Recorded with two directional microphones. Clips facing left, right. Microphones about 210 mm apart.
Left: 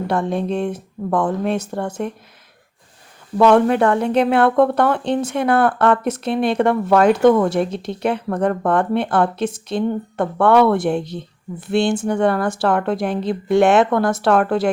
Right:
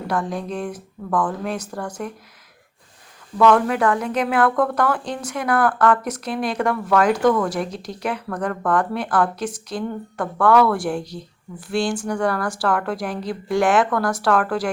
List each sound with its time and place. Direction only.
0.1 s speech: 25° left (ahead or behind)
3.3 s speech: 30° left (ahead or behind)